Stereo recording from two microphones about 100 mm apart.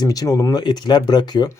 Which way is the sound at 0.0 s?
40° left (ahead or behind).